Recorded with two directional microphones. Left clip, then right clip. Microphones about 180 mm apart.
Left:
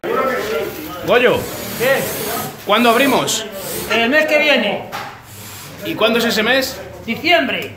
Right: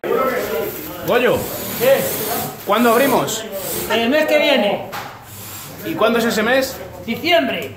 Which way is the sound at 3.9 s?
10° right (ahead or behind).